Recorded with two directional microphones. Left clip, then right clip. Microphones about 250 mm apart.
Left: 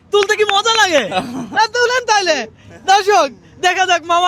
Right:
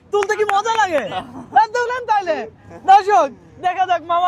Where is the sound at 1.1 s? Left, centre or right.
Left.